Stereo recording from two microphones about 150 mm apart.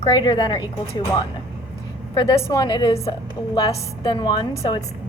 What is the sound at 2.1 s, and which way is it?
A woman's voice, 35° left (ahead or behind).